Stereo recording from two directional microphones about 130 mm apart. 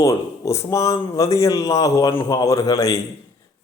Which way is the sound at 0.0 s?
25° left (ahead or behind).